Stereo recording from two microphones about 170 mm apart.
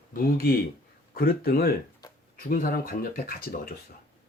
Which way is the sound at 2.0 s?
20° left (ahead or behind).